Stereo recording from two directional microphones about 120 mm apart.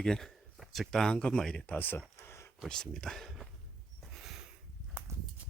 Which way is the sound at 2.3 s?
20° left (ahead or behind).